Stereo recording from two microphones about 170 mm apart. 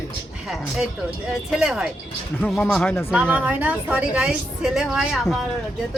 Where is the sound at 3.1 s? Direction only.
10° right (ahead or behind).